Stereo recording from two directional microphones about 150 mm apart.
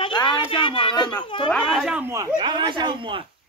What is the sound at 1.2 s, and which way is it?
Speech, 35° left (ahead or behind).